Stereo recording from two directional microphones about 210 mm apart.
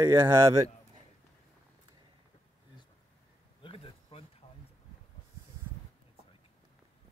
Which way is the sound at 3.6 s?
25° left (ahead or behind).